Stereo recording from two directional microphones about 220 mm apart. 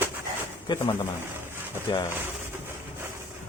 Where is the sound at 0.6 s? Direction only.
15° left (ahead or behind).